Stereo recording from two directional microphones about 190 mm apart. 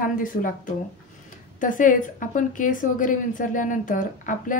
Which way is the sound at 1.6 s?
45° left (ahead or behind).